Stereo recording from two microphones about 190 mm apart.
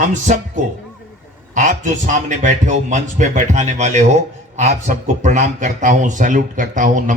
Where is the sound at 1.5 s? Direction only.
40° right (ahead or behind).